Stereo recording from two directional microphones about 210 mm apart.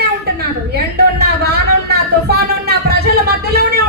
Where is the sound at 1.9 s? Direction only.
50° right (ahead or behind).